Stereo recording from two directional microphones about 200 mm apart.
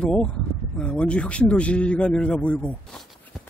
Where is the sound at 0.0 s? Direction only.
5° left (ahead or behind).